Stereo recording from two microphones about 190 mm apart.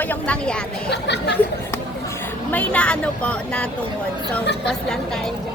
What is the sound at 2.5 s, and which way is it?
Speech, 5° left (ahead or behind).